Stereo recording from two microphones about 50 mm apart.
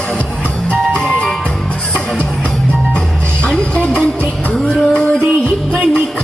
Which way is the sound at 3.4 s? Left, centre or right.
Left.